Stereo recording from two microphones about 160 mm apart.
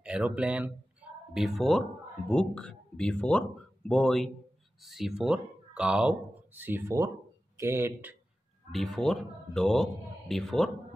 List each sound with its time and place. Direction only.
0.0 s speech: 10° right (ahead or behind)
8.7 s speech: centre (ahead or behind)